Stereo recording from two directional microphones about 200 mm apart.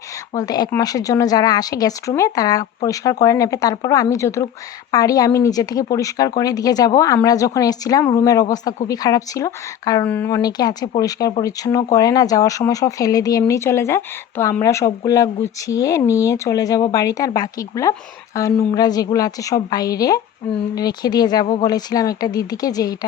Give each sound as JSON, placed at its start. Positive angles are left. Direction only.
{"t": 0.3, "sound": "a woman's voice", "side_deg": 20}